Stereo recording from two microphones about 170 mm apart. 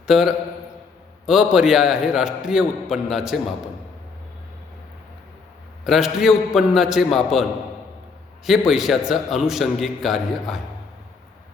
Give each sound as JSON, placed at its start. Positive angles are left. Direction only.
{"t": 0.1, "sound": "a man's voice", "side_deg": -5}
{"t": 5.8, "sound": "a man's voice", "side_deg": 0}
{"t": 8.4, "sound": "a man's voice", "side_deg": 0}